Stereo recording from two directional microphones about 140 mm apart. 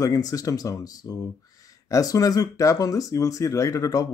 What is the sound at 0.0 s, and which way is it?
Speech, 25° left (ahead or behind).